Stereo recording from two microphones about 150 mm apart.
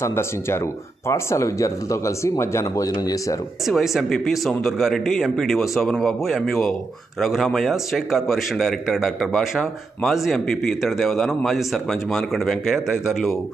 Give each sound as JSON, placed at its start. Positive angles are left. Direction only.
{"t": 0.0, "sound": "speech", "side_deg": 15}
{"t": 3.6, "sound": "a man's voice", "side_deg": 0}